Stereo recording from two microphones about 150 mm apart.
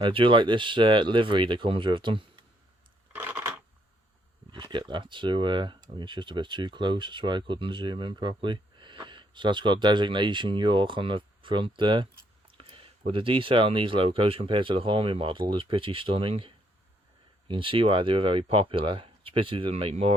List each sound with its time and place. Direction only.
0.0 s speech: 35° right (ahead or behind)
3.2 s a sound: 10° right (ahead or behind)
4.5 s speech: 30° right (ahead or behind)
12.5 s a sound: 35° right (ahead or behind)
13.1 s speech: 35° right (ahead or behind)
17.5 s speech: 35° right (ahead or behind)